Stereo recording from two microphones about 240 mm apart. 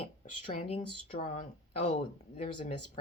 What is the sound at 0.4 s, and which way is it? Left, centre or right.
Speech, left.